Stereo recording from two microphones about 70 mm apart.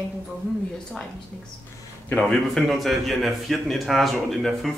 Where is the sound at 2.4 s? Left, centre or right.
Centre.